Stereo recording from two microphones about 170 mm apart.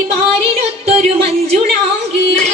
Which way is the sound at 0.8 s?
35° right (ahead or behind).